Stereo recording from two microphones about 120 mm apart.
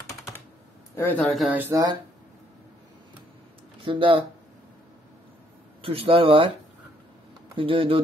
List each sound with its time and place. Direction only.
0.9 s speech: 20° left (ahead or behind)
1.2 s speech: centre (ahead or behind)
1.6 s speech: 30° right (ahead or behind)
3.8 s speech: 45° right (ahead or behind)
5.8 s speech: 50° right (ahead or behind)
7.5 s speech: 45° right (ahead or behind)